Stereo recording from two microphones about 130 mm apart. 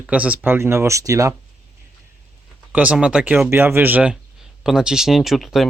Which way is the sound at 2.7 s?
10° right (ahead or behind).